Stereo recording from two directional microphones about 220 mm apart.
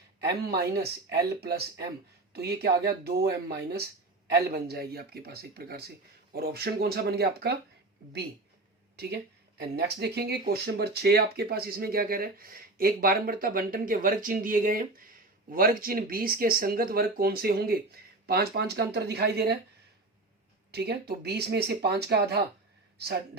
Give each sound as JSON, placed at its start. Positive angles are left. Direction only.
{"t": 0.2, "sound": "speech", "side_deg": -45}
{"t": 9.0, "sound": "speech", "side_deg": -50}
{"t": 20.7, "sound": "speech", "side_deg": -50}